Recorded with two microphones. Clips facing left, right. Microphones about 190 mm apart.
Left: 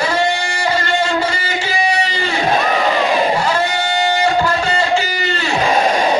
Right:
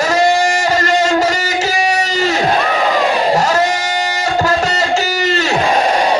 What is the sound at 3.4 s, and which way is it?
Music, 40° right (ahead or behind).